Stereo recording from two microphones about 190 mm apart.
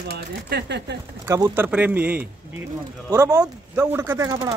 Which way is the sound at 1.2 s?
15° right (ahead or behind).